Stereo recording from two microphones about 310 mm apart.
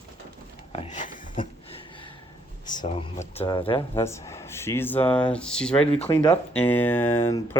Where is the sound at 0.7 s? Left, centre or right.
Left.